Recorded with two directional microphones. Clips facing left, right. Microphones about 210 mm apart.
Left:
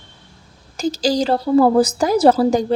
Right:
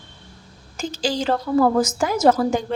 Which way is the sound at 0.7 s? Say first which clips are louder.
Left 6 dB; 40° left (ahead or behind).